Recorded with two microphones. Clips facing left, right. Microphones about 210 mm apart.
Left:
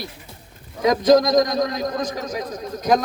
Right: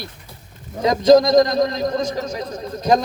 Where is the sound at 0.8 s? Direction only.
25° right (ahead or behind).